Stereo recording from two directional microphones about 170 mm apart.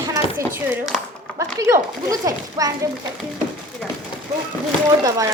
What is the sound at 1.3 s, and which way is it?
Speech, 20° right (ahead or behind).